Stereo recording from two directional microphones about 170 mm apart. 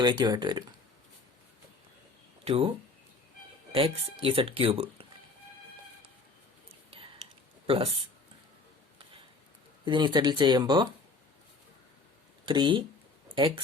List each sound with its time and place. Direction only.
0.0 s speech: 25° right (ahead or behind)
2.4 s speech: 35° right (ahead or behind)
3.8 s speech: 35° right (ahead or behind)
7.7 s speech: 35° right (ahead or behind)
9.8 s speech: 30° right (ahead or behind)
12.5 s speech: 30° right (ahead or behind)